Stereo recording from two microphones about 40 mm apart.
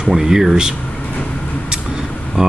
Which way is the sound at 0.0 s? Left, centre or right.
Centre.